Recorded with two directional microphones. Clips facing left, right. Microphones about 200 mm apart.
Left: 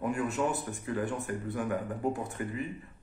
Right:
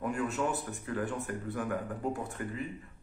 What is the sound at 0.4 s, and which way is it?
Speech, 15° left (ahead or behind).